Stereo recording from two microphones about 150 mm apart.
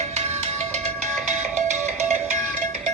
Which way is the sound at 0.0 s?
45° right (ahead or behind).